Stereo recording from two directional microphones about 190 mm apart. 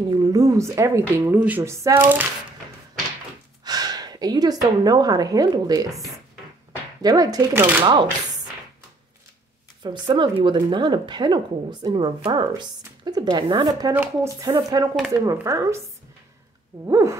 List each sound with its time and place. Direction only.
0.1 s a woman's voice: 20° right (ahead or behind)
3.6 s a woman's voice: 20° right (ahead or behind)
5.9 s speech: centre (ahead or behind)
7.0 s speech: 20° right (ahead or behind)
9.8 s a woman's voice: 25° right (ahead or behind)
16.8 s a woman's voice: 15° right (ahead or behind)